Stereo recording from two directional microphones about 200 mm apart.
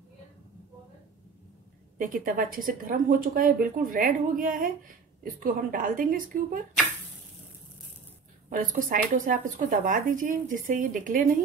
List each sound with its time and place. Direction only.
2.0 s a woman's voice: 45° right (ahead or behind)
8.5 s speech: 40° right (ahead or behind)